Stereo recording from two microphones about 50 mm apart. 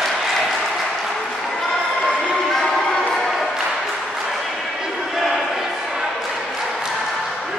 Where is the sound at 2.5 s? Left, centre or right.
Centre.